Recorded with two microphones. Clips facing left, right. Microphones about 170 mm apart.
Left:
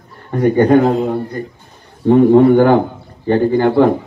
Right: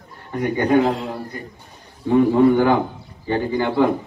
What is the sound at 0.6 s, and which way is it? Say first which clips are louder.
A man's voice: left 6 dB; 55° left (ahead or behind).